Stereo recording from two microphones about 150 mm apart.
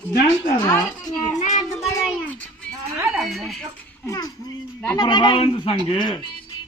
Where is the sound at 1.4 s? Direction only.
55° left (ahead or behind).